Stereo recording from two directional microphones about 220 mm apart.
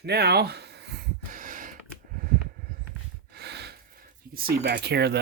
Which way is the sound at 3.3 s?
50° right (ahead or behind).